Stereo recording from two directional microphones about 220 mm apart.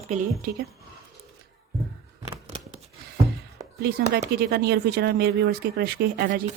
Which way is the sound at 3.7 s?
50° right (ahead or behind).